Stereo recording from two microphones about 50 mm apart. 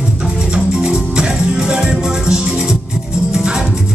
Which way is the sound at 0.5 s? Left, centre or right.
Centre.